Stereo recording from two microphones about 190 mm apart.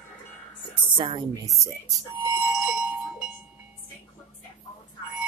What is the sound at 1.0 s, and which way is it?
Speech, 25° right (ahead or behind).